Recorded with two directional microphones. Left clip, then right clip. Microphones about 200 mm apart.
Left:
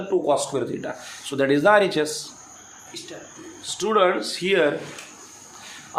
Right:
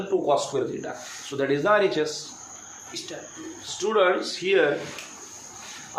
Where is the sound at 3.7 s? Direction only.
60° left (ahead or behind).